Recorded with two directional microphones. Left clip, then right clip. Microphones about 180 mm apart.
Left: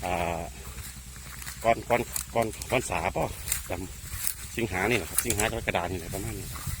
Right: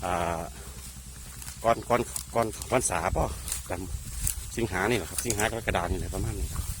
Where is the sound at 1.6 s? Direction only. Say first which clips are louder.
Even; 15° right (ahead or behind).